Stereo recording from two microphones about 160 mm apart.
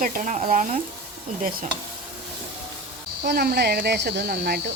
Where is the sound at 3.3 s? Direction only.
80° right.